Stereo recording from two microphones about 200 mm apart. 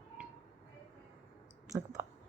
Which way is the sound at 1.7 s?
15° right (ahead or behind).